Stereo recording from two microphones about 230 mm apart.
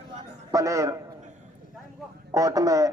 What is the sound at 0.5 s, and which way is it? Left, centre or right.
Speech, centre.